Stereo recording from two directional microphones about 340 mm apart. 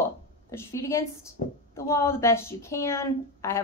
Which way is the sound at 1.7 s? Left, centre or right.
Centre.